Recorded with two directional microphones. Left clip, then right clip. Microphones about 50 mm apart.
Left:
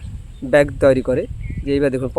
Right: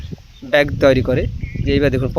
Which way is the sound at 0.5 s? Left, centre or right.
Centre.